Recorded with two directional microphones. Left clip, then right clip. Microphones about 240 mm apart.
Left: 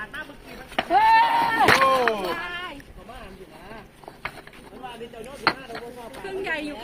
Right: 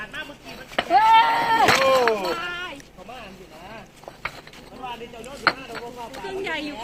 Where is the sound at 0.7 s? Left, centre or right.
Centre.